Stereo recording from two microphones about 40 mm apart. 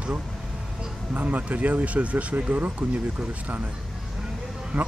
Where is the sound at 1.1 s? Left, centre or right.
Right.